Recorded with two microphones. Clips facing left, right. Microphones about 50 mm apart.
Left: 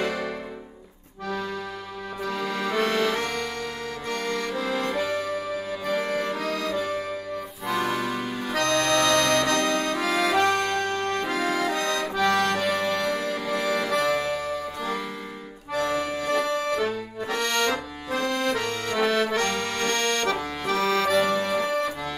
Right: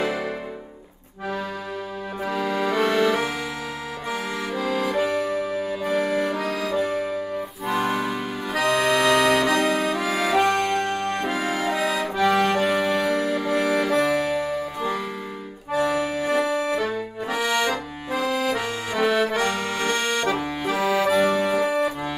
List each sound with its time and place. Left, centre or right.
0.0 s music: centre
2.2 s accordion: centre
4.3 s accordion: centre